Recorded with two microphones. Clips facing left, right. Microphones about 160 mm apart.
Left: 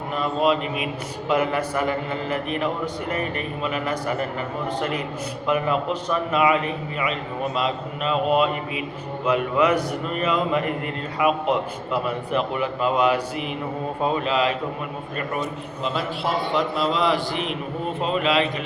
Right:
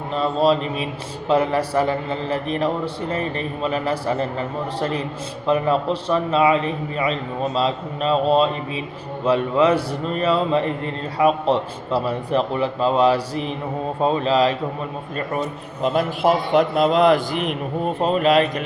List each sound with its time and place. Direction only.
0.1 s a man's voice: 30° right (ahead or behind)
15.8 s a man's voice: 50° right (ahead or behind)